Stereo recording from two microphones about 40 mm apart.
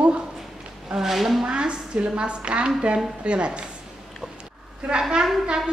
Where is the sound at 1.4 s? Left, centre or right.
Right.